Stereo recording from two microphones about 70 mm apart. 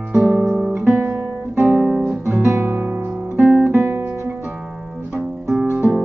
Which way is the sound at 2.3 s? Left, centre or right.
Right.